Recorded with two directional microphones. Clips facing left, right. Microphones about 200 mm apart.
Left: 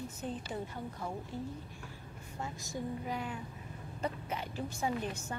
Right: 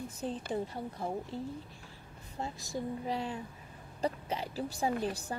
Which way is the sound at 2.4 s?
35° right (ahead or behind).